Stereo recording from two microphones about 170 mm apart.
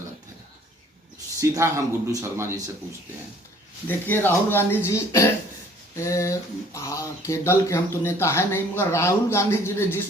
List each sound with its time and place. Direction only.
1.4 s speech: 15° right (ahead or behind)
3.8 s speech: 10° left (ahead or behind)